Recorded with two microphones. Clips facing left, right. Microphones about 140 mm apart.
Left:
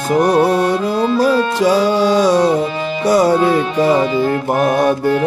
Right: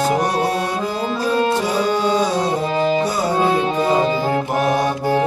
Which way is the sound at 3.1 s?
75° left (ahead or behind).